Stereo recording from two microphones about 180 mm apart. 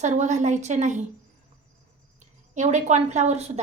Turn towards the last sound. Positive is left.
turn(degrees=-40)  # may be behind; listen again after turning